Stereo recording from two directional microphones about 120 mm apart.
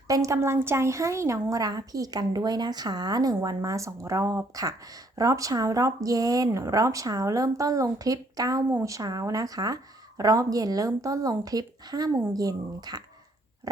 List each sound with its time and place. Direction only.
0.1 s speech: 25° right (ahead or behind)